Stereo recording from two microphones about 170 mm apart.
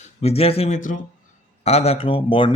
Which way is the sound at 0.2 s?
35° left (ahead or behind).